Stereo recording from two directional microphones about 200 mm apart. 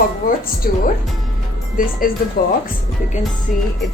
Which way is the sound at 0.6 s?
45° left (ahead or behind).